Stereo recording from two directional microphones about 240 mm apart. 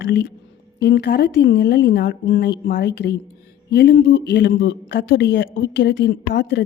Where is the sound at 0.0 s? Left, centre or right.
Left.